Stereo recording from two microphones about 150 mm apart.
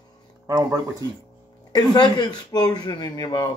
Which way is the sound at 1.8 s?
30° left (ahead or behind).